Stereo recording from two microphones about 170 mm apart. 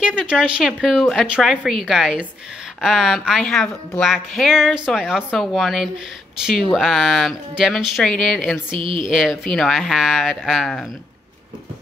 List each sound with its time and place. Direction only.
0.0 s speech: 5° right (ahead or behind)
8.7 s a woman's voice: 30° right (ahead or behind)
9.1 s speech: centre (ahead or behind)